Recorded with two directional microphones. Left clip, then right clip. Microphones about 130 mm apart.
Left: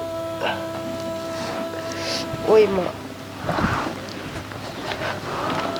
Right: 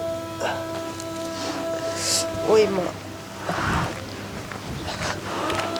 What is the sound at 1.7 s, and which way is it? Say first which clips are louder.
Music: right 2 dB; 5° right (ahead or behind).